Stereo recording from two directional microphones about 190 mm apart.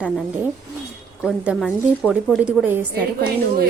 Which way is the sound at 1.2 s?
5° right (ahead or behind).